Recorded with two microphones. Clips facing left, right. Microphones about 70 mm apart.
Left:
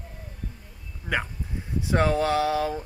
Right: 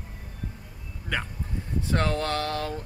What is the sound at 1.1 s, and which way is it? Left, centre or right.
Speech, centre.